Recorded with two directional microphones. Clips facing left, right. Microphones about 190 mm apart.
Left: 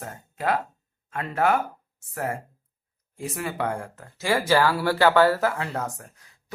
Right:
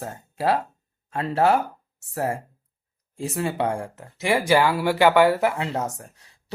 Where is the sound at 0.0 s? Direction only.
30° right (ahead or behind).